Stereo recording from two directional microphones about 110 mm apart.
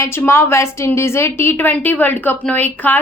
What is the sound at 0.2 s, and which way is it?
A woman's voice, 25° left (ahead or behind).